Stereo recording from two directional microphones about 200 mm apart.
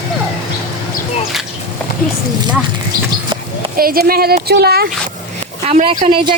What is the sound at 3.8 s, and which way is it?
Speech, 50° right (ahead or behind).